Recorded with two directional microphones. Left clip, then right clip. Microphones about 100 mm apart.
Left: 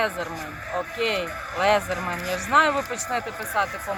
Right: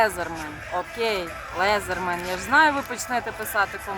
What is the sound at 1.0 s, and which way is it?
Speech, 60° right (ahead or behind).